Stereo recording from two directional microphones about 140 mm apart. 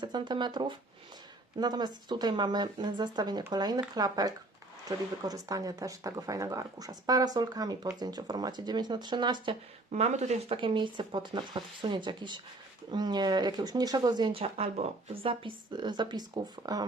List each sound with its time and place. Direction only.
0.0 s speech: 30° right (ahead or behind)
9.9 s speech: 55° right (ahead or behind)
10.6 s speech: 35° right (ahead or behind)